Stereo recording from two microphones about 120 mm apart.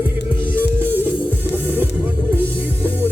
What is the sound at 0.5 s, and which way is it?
Music, 15° right (ahead or behind).